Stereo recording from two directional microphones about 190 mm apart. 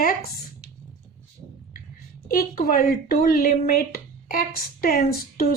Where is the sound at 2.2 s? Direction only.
50° left (ahead or behind).